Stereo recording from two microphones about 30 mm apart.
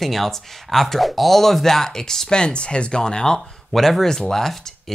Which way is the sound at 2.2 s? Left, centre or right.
Left.